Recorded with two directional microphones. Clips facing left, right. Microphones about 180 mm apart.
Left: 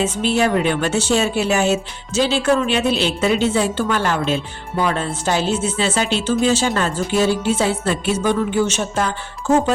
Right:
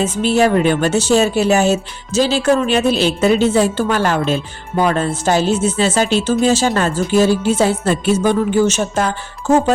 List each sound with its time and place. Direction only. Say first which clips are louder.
0.0 s speech: right 4 dB; 40° right (ahead or behind)